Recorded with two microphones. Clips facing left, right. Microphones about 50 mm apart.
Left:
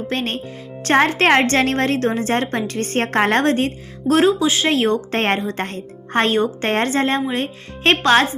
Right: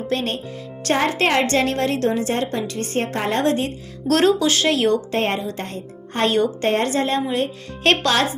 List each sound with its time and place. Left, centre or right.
0.1 s a woman's voice: left
4.0 s speech: centre
4.7 s speech: left
5.1 s speech: left